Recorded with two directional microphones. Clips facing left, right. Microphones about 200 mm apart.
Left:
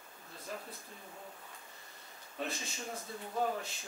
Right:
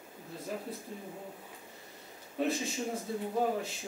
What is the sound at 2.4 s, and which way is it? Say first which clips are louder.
Speech: right 9 dB; 5° right (ahead or behind).